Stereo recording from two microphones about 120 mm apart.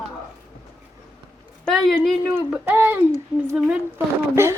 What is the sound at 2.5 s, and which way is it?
Speech, 15° right (ahead or behind).